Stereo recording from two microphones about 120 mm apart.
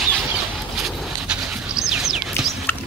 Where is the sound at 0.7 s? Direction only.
5° right (ahead or behind).